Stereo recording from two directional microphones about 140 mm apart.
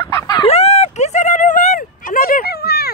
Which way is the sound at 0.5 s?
50° left (ahead or behind).